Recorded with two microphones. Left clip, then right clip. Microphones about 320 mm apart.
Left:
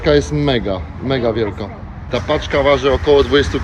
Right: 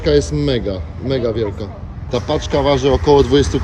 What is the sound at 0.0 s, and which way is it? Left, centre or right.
Speech, centre.